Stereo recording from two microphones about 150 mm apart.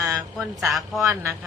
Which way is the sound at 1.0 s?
20° right (ahead or behind).